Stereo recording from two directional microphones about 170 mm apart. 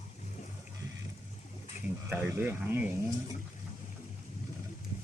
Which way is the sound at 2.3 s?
10° right (ahead or behind).